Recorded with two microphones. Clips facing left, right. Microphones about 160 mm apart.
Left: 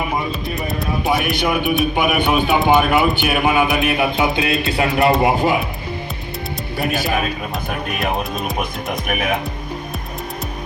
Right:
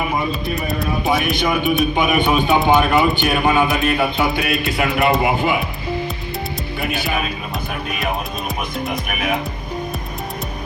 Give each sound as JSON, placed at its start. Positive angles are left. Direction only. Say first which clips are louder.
{"t": 0.3, "sound": "speech", "louder": "right 1 dB", "side_deg": 0}
{"t": 3.8, "sound": "speech", "louder": "left 1 dB", "side_deg": 20}
{"t": 4.8, "sound": "speech", "louder": "left 2 dB", "side_deg": 35}
{"t": 6.7, "sound": "speech", "louder": "left 3 dB", "side_deg": 45}